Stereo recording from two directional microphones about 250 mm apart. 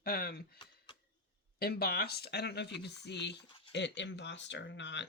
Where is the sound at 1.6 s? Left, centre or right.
Left.